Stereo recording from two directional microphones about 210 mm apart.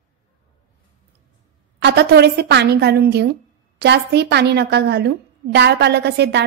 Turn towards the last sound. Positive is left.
turn(degrees=-55)  # may be behind; listen again after turning